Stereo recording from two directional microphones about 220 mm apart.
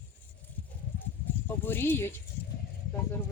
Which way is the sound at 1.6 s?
10° left (ahead or behind).